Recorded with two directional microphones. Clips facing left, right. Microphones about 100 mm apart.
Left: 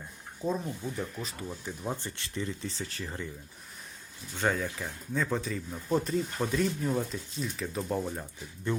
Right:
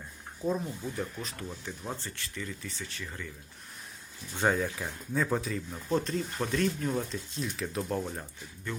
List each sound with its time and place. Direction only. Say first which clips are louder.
0.4 s speech: even; centre (ahead or behind)
1.4 s speech: left 2 dB; 10° left (ahead or behind); by 3.2 s 30° left (ahead or behind)
4.5 s speech: right 2 dB; 5° right (ahead or behind)